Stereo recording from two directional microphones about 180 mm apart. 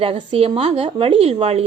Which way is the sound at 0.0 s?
30° right (ahead or behind).